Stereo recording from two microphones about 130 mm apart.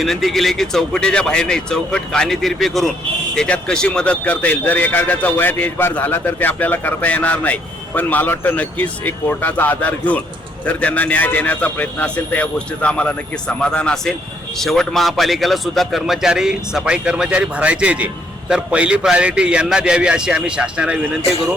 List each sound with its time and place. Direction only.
0.0 s a man's voice: centre (ahead or behind)